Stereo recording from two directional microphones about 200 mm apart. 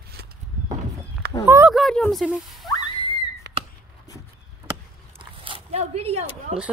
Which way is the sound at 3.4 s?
60° right (ahead or behind).